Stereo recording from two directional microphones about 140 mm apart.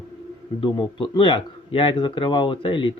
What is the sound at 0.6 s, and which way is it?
A man's voice, 35° left (ahead or behind).